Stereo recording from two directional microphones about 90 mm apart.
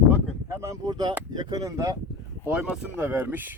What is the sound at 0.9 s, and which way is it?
Speech, 50° right (ahead or behind).